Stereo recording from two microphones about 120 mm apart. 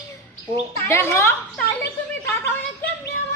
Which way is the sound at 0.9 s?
20° left (ahead or behind).